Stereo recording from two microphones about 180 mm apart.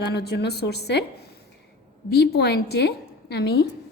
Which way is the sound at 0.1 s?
65° left (ahead or behind).